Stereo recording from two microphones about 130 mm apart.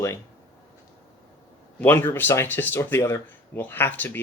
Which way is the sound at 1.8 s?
15° left (ahead or behind).